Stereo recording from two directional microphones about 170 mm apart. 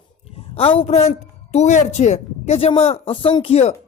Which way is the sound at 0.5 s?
35° left (ahead or behind).